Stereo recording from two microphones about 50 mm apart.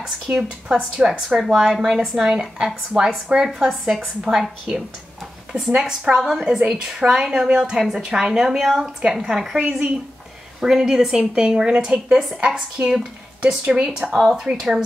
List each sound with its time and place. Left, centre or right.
0.0 s a woman's voice: centre
4.2 s a woman's voice: centre
9.6 s speech: right
10.6 s a woman's voice: centre
14.0 s a woman's voice: centre